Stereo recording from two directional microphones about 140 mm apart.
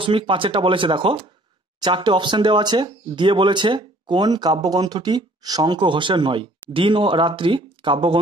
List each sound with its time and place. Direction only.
0.0 s speech: 35° right (ahead or behind)